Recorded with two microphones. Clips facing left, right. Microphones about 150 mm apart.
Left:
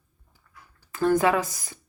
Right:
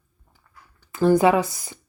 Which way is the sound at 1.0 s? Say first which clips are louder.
Right 4 dB; 10° right (ahead or behind).